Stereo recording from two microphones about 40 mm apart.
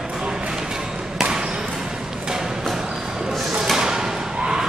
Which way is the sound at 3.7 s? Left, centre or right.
Centre.